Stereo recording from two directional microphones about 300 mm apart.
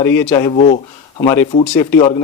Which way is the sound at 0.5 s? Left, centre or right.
Left.